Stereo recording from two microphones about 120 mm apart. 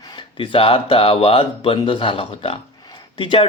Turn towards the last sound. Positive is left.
turn(degrees=45)  # may be behind; listen again after turning